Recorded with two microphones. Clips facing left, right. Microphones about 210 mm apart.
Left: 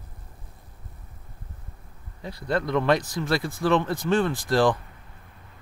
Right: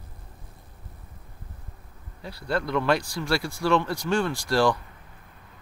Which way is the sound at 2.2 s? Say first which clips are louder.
Left 2 dB; 20° left (ahead or behind).